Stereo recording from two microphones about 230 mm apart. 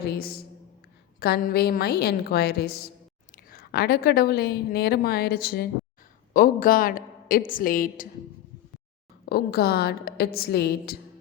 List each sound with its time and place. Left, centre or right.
0.1 s a woman's voice: left
9.3 s a woman's voice: left